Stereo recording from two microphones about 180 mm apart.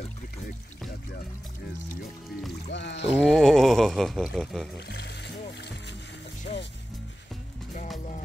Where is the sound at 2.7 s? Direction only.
80° left.